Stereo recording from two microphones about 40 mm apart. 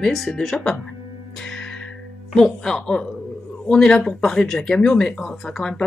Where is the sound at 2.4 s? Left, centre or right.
Centre.